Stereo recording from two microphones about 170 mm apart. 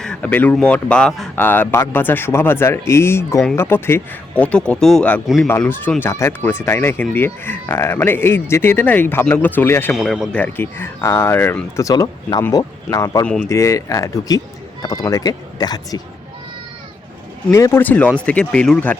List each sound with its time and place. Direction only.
0.0 s speech: 5° left (ahead or behind)
9.9 s speech: centre (ahead or behind); by 16.0 s 25° left (ahead or behind)
17.5 s speech: 15° left (ahead or behind)